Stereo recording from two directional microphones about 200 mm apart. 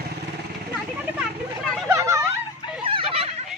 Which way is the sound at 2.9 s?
25° right (ahead or behind).